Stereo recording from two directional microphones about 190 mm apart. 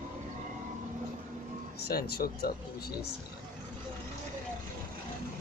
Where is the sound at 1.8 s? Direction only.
55° left (ahead or behind).